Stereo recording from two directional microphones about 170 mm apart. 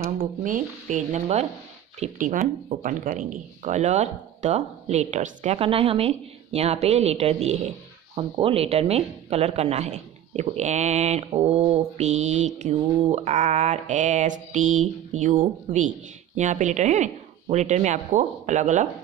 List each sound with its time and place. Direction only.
0.2 s mantra: 50° right (ahead or behind)
2.0 s speech: 50° right (ahead or behind)
13.1 s mantra: 40° right (ahead or behind)